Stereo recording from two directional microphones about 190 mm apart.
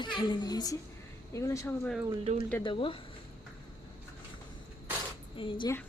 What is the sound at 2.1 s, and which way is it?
Speech, 30° right (ahead or behind).